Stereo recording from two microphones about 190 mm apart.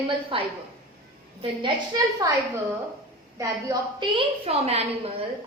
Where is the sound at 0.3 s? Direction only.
30° right (ahead or behind).